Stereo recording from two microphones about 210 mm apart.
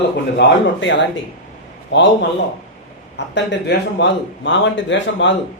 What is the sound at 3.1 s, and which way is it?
Speech, 55° left (ahead or behind).